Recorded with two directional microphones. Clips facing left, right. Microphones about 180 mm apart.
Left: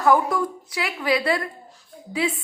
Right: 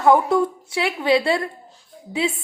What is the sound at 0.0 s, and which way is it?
A woman's voice, 25° right (ahead or behind).